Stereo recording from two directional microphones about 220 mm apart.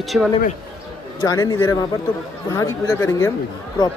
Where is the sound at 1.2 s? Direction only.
20° left (ahead or behind).